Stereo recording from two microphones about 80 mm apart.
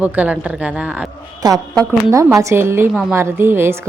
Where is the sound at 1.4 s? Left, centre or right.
Right.